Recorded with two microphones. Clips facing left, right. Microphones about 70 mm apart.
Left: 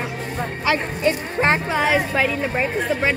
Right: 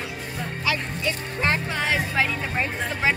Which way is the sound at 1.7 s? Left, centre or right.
Centre.